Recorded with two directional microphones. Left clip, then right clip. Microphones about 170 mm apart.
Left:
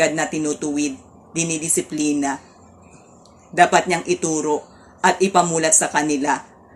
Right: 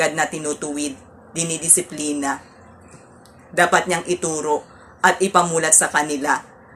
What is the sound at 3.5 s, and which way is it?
Speech, 20° left (ahead or behind).